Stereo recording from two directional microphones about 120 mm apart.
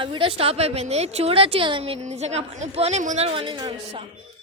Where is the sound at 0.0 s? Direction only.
45° right (ahead or behind).